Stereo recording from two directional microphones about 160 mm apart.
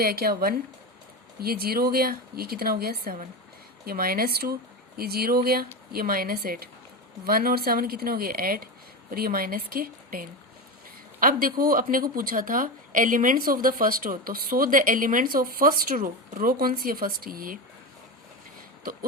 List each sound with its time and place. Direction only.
0.0 s a woman's voice: 70° right (ahead or behind)